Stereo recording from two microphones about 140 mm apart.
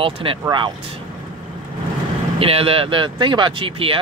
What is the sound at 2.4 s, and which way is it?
Speech, 45° right (ahead or behind).